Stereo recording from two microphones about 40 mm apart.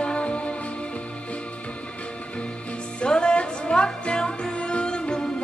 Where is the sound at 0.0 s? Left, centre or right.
Left.